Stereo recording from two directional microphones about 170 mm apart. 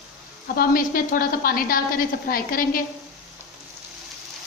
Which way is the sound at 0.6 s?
60° left (ahead or behind).